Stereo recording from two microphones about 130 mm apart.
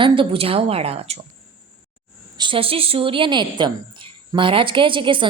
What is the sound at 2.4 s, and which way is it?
A woman's voice, 45° right (ahead or behind).